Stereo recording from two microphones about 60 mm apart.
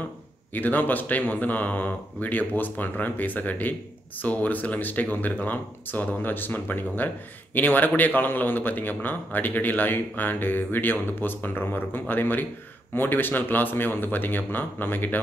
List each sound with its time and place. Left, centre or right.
0.5 s a man's voice: left